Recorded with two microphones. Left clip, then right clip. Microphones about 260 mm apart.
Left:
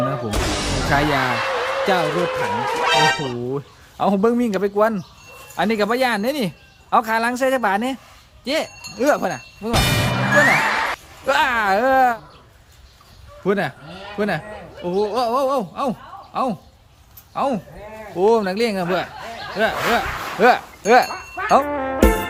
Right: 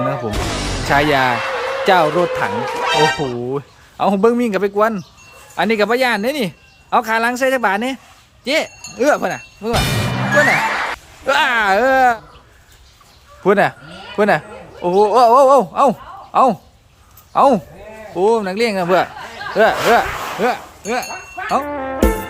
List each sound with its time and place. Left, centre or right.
0.1 s speech: centre
13.4 s a man's voice: centre
18.2 s speech: centre
20.4 s speech: centre
21.6 s music: centre